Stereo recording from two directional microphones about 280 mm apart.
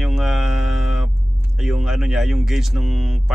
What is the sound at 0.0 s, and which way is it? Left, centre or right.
Mantra, centre.